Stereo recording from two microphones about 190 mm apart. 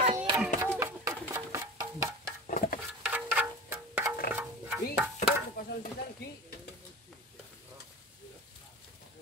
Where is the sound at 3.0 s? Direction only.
5° right (ahead or behind).